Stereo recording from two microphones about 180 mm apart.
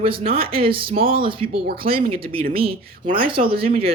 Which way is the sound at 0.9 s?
55° right (ahead or behind).